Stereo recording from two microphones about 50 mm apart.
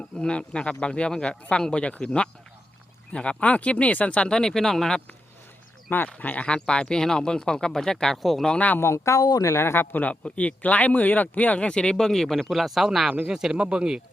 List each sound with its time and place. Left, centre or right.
0.0 s speech: left
4.3 s speech: centre
6.1 s speech: left; by 8.4 s centre
8.5 s speech: left
8.8 s speech: left
9.9 s speech: left; by 13.1 s centre
13.2 s speech: centre